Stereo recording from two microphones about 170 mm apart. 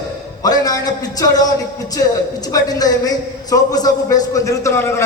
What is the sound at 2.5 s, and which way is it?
A man's voice, 20° left (ahead or behind).